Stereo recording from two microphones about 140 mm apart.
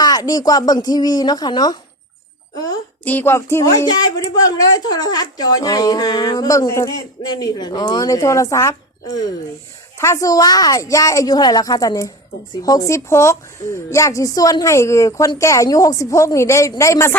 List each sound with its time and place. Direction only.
0.0 s speech: 25° left (ahead or behind)
3.0 s speech: 15° left (ahead or behind)